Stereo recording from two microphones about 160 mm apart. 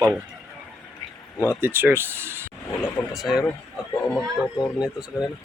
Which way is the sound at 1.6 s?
15° right (ahead or behind).